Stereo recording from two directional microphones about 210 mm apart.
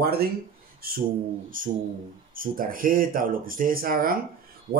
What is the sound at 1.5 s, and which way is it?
Speech, 40° right (ahead or behind).